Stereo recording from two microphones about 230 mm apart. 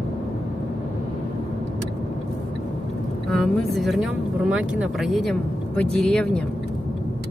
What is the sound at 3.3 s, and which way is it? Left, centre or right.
Speech, centre.